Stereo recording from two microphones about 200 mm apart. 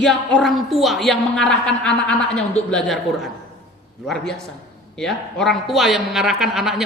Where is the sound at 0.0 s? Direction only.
Centre (ahead or behind).